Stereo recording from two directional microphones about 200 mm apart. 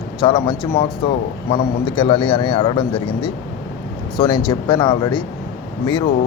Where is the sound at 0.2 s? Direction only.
25° left (ahead or behind).